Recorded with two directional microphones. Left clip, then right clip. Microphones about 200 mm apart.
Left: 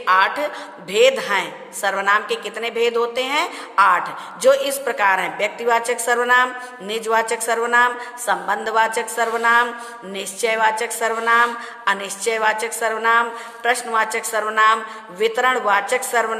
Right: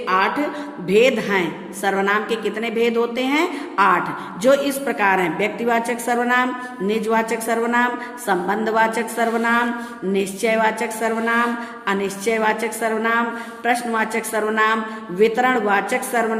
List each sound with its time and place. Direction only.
0.0 s a woman's voice: 25° left (ahead or behind)